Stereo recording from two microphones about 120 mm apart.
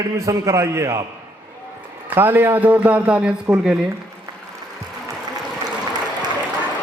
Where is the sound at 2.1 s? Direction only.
15° right (ahead or behind).